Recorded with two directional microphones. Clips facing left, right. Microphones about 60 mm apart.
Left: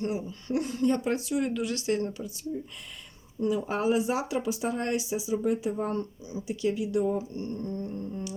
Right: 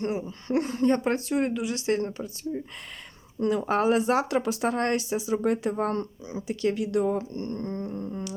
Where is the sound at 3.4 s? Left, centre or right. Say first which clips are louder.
Right 3 dB; right.